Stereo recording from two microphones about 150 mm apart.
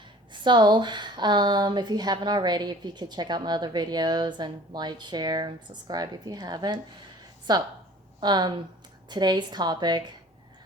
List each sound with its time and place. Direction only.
0.3 s speech: 30° right (ahead or behind)